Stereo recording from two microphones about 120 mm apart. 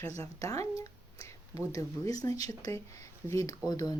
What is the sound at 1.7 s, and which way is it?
Speech, 30° left (ahead or behind).